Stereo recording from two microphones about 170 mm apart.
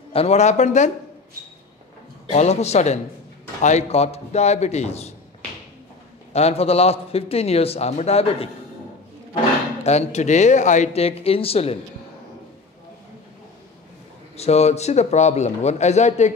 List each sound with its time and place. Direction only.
0.1 s a man's voice: 35° left (ahead or behind)
2.3 s a man's voice: 40° left (ahead or behind)
6.3 s a man's voice: 35° left (ahead or behind)
9.8 s a man's voice: 40° left (ahead or behind)
14.3 s a man's voice: 40° left (ahead or behind)